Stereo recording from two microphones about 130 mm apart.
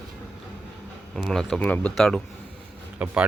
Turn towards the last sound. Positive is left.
turn(degrees=-10)  # may be behind; listen again after turning